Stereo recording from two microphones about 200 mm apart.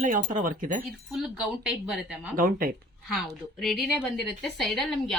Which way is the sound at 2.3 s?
45° right (ahead or behind).